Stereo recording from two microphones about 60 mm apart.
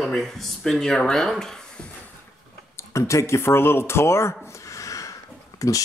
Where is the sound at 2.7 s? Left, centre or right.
Left.